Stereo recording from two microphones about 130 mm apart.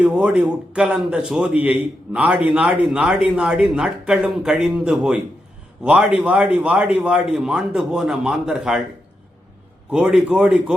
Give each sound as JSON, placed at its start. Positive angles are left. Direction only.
{"t": 0.0, "sound": "a man's voice", "side_deg": -10}
{"t": 9.9, "sound": "a man's voice", "side_deg": -5}